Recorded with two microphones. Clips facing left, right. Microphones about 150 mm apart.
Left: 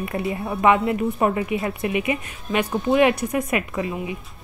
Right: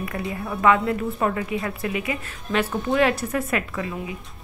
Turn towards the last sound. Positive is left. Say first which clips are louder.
# left 3 dB
turn(degrees=25)  # may be behind; listen again after turning